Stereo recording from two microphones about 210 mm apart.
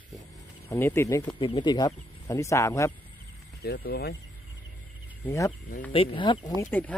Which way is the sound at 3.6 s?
50° left (ahead or behind).